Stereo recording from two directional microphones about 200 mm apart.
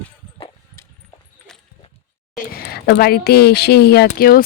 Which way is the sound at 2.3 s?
50° left (ahead or behind).